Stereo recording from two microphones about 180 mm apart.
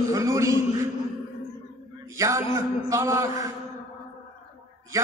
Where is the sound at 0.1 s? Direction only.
15° right (ahead or behind).